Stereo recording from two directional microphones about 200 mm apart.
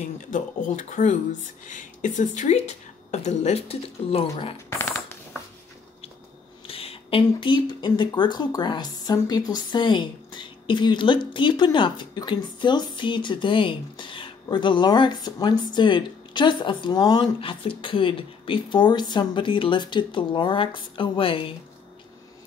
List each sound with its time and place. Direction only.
0.0 s speech: 40° left (ahead or behind)
4.6 s shuffling cards: 10° left (ahead or behind)
6.7 s a woman's voice: 30° left (ahead or behind)